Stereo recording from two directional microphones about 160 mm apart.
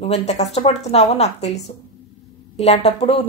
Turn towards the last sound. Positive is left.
turn(degrees=40)  # may be behind; listen again after turning